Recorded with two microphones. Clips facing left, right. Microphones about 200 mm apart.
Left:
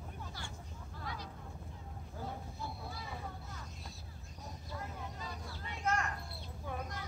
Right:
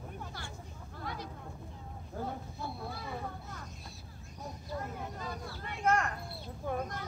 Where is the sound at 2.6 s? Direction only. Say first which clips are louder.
Right 4 dB; 55° right (ahead or behind).